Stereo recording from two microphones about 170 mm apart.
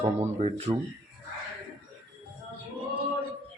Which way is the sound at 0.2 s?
40° right (ahead or behind).